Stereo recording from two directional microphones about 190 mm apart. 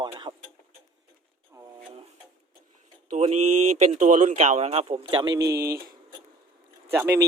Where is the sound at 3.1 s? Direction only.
35° right (ahead or behind); by 5.8 s 15° right (ahead or behind).